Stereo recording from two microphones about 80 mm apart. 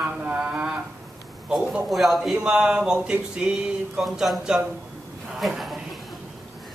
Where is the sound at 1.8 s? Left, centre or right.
Centre.